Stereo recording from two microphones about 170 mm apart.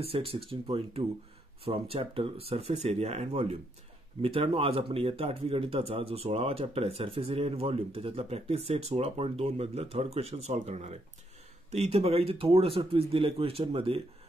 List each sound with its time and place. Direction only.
0.0 s speech: 35° right (ahead or behind)